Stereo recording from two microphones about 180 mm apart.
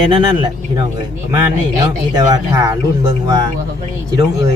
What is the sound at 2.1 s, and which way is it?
Speech, 20° right (ahead or behind).